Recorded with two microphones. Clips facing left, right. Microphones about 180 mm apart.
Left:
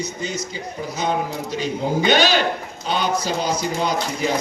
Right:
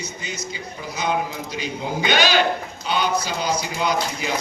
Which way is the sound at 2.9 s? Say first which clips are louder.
Left 1 dB; 45° left (ahead or behind).